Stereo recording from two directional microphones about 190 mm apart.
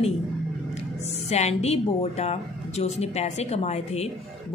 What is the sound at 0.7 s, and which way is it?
Music, 35° left (ahead or behind).